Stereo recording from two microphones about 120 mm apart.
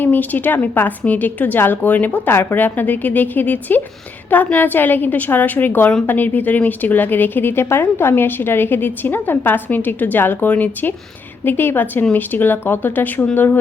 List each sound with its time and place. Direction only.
0.0 s a woman's voice: 15° left (ahead or behind)